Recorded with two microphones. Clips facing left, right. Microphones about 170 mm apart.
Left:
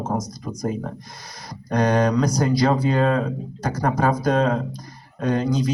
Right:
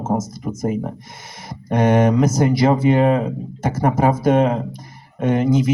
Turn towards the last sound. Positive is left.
turn(degrees=-25)  # may be behind; listen again after turning